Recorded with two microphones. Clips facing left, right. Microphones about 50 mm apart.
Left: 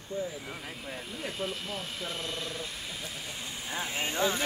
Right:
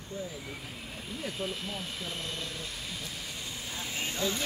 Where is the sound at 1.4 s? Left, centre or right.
Centre.